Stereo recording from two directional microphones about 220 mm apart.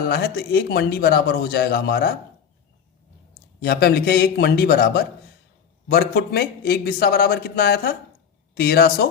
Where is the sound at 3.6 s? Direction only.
45° left (ahead or behind).